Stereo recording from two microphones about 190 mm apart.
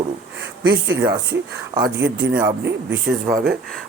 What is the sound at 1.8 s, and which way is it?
Speech, 60° right (ahead or behind).